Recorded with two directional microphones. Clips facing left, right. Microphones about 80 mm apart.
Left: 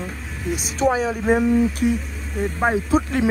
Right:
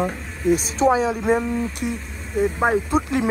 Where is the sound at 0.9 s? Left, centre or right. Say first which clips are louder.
Right 2 dB; centre.